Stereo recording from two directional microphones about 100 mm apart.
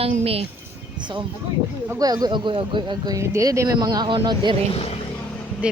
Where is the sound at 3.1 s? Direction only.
30° right (ahead or behind); by 4.6 s 50° right (ahead or behind).